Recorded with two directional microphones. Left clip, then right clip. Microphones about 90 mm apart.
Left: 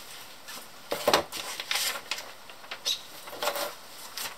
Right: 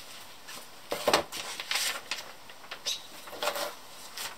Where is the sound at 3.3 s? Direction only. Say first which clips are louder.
Left 1 dB; centre (ahead or behind).